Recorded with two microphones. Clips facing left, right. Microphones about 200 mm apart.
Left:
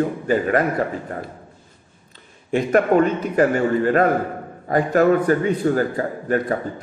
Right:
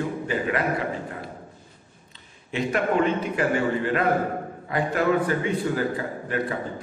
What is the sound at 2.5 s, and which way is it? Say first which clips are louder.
A man's voice: left 7 dB; 50° left (ahead or behind).